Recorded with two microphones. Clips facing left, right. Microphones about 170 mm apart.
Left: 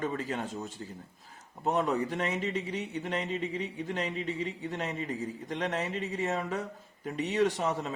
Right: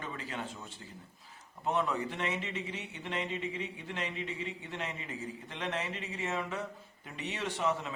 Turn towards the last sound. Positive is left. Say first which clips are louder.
# left 6 dB
turn(degrees=40)  # may be behind; listen again after turning